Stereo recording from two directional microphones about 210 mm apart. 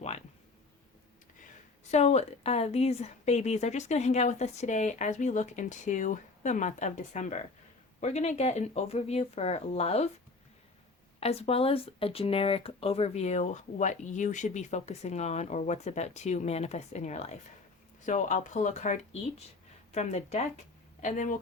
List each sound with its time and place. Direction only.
1.9 s speech: 30° left (ahead or behind)
11.2 s speech: 30° left (ahead or behind)